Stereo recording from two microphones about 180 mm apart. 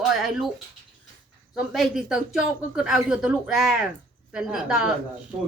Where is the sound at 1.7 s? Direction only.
Centre (ahead or behind).